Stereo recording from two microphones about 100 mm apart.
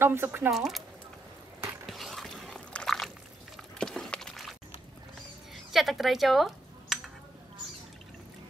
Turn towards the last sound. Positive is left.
turn(degrees=0)  # may be behind; listen again after turning